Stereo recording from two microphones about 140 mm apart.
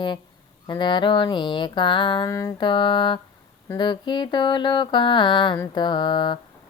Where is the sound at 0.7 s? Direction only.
35° left (ahead or behind).